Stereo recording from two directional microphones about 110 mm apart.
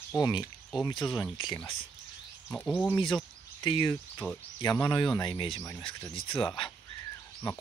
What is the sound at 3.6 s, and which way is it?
Speech, 45° left (ahead or behind).